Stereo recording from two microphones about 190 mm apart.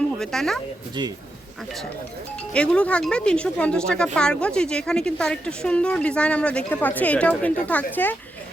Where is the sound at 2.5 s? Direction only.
5° left (ahead or behind).